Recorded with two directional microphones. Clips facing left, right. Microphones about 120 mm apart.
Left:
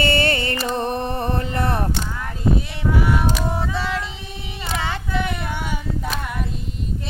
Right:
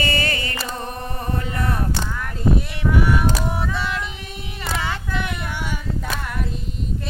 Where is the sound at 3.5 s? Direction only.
25° left (ahead or behind).